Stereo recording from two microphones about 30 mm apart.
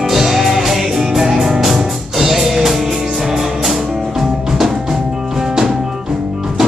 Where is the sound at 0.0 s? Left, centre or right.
Centre.